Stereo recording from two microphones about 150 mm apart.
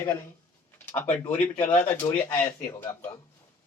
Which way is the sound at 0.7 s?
15° left (ahead or behind).